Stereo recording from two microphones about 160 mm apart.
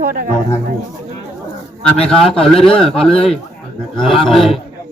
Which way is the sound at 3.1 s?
35° left (ahead or behind).